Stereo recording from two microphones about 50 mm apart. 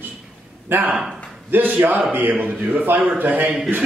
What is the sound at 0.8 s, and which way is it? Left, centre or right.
Speech, centre.